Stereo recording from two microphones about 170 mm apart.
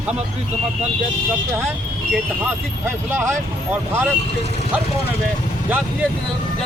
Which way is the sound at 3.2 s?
15° right (ahead or behind).